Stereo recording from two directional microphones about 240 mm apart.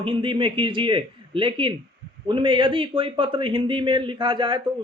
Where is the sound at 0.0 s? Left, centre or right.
Right.